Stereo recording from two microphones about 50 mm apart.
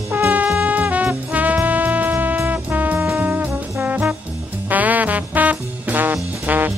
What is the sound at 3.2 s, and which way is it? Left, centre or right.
Brass instrument, right.